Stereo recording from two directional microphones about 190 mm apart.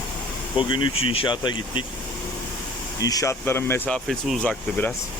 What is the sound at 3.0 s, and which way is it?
Speech, 20° left (ahead or behind).